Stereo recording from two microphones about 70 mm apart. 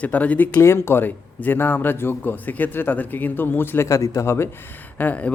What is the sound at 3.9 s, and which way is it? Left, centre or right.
Speech, left.